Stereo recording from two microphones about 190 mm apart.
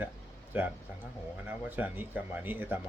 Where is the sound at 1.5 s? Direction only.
10° right (ahead or behind).